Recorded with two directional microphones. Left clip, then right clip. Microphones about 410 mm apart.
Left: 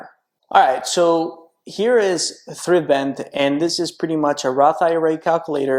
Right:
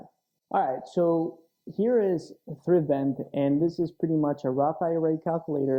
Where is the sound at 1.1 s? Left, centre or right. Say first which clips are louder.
Left 8 dB; centre.